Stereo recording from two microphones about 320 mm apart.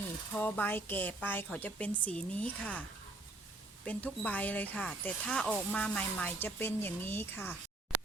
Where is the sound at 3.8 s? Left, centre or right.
Centre.